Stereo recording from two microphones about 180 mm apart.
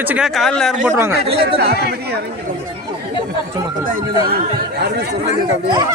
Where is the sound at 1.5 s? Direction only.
60° right (ahead or behind).